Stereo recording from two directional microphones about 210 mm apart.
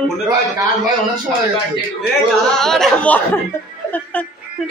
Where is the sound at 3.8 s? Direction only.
10° left (ahead or behind).